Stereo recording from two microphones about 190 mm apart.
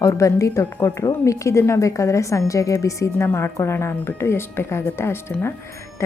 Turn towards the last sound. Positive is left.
turn(degrees=10)  # may be behind; listen again after turning